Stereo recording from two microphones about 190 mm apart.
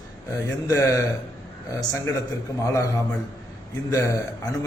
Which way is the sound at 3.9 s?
15° left (ahead or behind).